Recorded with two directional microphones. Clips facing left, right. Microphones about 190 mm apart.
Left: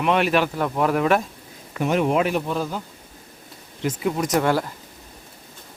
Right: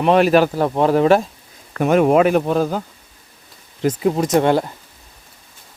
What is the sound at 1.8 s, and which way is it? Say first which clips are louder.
Speech: right 7 dB; 50° right (ahead or behind).